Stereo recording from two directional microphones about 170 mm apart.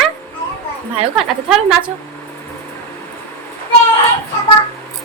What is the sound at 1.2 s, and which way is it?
Speech, centre (ahead or behind).